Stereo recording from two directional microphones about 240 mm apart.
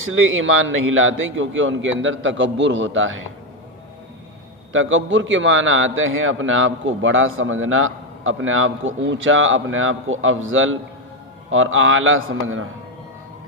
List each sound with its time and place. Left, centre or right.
0.0 s a man's voice: right
4.7 s a man's voice: right